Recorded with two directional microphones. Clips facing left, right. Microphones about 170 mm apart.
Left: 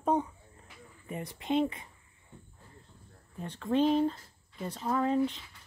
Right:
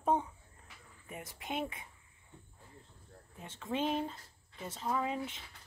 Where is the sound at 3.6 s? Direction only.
5° right (ahead or behind).